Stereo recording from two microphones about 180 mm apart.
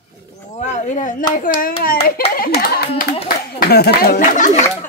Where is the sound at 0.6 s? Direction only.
40° left (ahead or behind).